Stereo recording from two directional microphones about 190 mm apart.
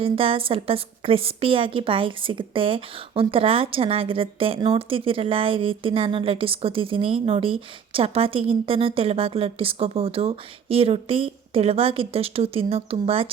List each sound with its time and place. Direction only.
0.0 s a woman's voice: 30° right (ahead or behind)